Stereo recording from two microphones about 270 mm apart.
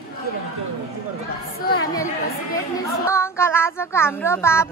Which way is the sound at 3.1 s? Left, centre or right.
Centre.